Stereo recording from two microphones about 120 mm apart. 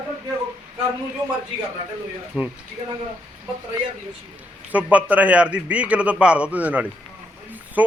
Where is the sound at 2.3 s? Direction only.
Centre (ahead or behind).